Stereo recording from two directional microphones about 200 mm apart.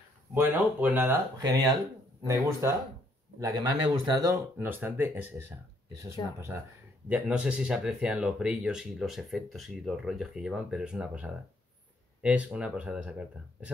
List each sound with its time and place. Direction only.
0.3 s speech: 10° right (ahead or behind)
1.4 s speech: 20° right (ahead or behind)
7.1 s speech: 5° right (ahead or behind)